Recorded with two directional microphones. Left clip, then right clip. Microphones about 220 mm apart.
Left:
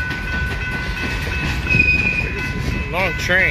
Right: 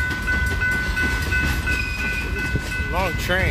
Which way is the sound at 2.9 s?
5° right (ahead or behind).